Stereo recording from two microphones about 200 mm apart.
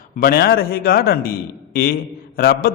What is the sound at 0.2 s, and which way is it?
A man's voice, 50° left (ahead or behind).